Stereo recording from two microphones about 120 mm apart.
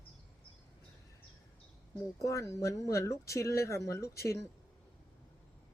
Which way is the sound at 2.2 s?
25° left (ahead or behind).